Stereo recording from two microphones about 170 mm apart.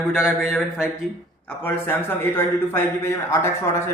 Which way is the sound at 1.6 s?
10° left (ahead or behind).